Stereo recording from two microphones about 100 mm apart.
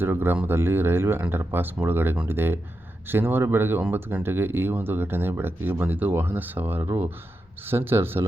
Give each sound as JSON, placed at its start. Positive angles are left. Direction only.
{"t": 0.0, "sound": "speech", "side_deg": -20}